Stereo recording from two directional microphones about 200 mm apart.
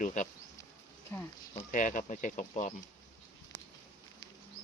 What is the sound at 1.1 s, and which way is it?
Speech, 10° left (ahead or behind).